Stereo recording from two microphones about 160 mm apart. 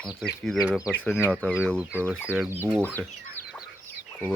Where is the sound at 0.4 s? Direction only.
Centre (ahead or behind).